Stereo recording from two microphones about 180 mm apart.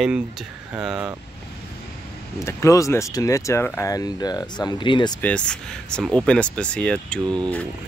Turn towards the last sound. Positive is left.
turn(degrees=5)  # may be behind; listen again after turning